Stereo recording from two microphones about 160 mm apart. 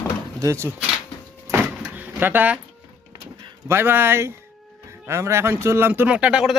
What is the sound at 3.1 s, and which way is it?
Vehicle, 20° right (ahead or behind).